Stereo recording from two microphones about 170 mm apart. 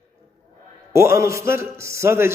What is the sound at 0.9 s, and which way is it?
A man's voice, 15° right (ahead or behind).